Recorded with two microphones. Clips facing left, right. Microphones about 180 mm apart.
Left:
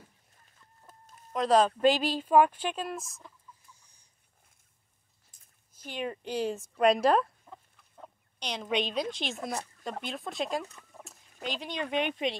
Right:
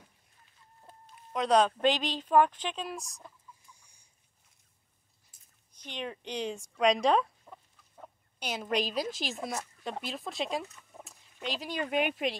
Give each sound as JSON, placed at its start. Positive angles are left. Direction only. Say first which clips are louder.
{"t": 0.9, "sound": "chicken", "louder": "right 2 dB", "side_deg": 45}
{"t": 1.3, "sound": "speech", "louder": "left 1 dB", "side_deg": 0}
{"t": 5.3, "sound": "a sound", "louder": "left 2 dB", "side_deg": -10}
{"t": 5.9, "sound": "speech", "louder": "left 4 dB", "side_deg": 5}